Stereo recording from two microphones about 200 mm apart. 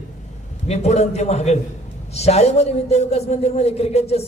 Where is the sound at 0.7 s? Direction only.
35° left (ahead or behind).